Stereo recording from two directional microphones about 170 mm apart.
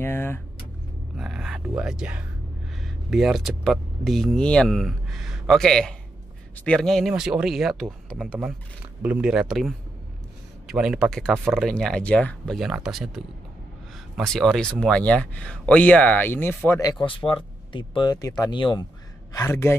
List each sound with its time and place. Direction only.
0.0 s vehicle: 15° left (ahead or behind)
1.1 s speech: centre (ahead or behind); by 16.9 s 15° left (ahead or behind)
17.0 s speech: 30° left (ahead or behind)
19.3 s speech: 15° left (ahead or behind)